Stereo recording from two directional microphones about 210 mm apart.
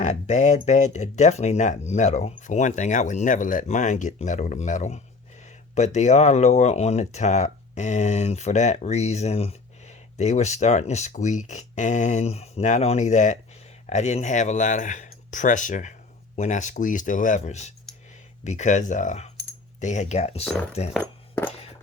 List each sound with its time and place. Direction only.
0.0 s speech: 35° left (ahead or behind)
20.4 s speech: centre (ahead or behind)